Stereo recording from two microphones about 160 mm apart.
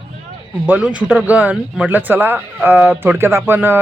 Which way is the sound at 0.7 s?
10° right (ahead or behind).